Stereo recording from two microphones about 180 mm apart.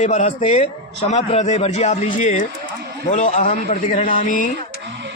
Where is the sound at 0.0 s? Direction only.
40° left (ahead or behind).